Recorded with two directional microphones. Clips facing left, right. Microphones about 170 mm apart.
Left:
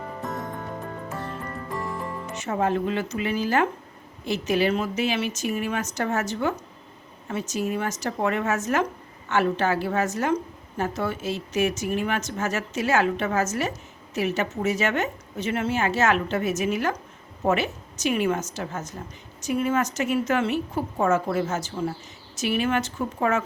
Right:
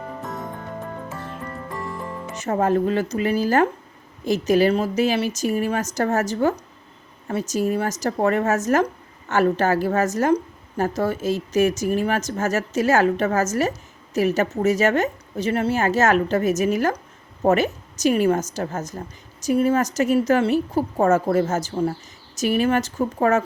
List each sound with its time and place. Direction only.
2.3 s a woman's voice: 40° right (ahead or behind)